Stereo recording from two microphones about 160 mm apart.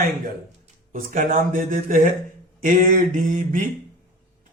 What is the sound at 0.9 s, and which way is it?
Speech, 55° right (ahead or behind).